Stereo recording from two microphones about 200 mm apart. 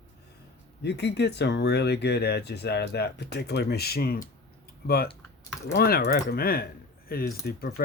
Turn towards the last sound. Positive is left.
turn(degrees=50)  # may be behind; listen again after turning